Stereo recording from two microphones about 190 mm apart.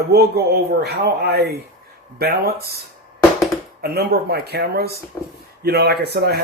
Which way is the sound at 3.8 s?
55° right (ahead or behind).